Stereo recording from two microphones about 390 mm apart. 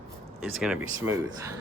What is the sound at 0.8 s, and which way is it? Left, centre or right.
Speech, right.